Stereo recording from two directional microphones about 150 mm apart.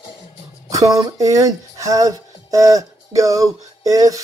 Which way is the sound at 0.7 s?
20° right (ahead or behind).